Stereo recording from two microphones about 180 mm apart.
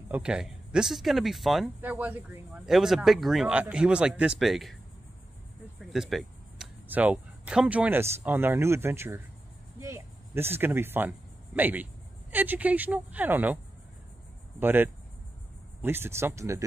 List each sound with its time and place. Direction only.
0.1 s speech: 5° right (ahead or behind)
5.8 s a sound: centre (ahead or behind)
6.9 s speech: 10° right (ahead or behind)
14.6 s speech: 10° right (ahead or behind)